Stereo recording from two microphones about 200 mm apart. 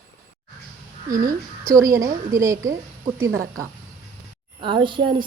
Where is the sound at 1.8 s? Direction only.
15° right (ahead or behind).